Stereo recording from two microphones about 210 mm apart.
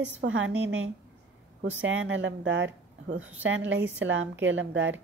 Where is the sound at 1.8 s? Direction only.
65° right (ahead or behind).